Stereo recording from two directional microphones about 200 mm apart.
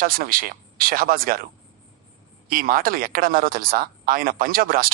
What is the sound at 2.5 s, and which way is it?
Speech, 45° right (ahead or behind).